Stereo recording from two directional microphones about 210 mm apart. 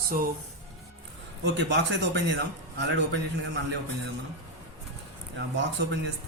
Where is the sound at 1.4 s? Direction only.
55° right (ahead or behind).